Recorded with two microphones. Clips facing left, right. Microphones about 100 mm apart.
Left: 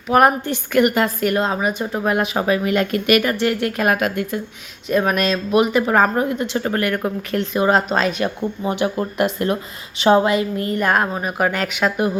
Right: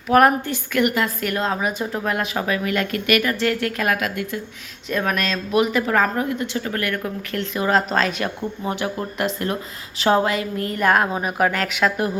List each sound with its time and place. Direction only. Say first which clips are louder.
0.1 s speech: even; 10° left (ahead or behind)
0.4 s a woman's voice: left 4 dB; 35° left (ahead or behind)
1.2 s speech: left 4 dB; 20° left (ahead or behind)
4.9 s speech: left 5 dB; 15° left (ahead or behind); by 7.1 s 30° left (ahead or behind)
7.3 s speech: left 4 dB; 20° left (ahead or behind)
10.7 s a woman's voice: right 2 dB; centre (ahead or behind)